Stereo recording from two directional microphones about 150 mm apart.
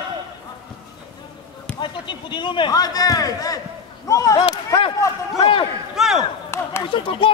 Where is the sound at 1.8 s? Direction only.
30° left (ahead or behind).